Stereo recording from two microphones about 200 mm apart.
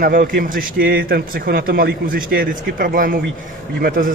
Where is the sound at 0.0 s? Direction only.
45° right (ahead or behind).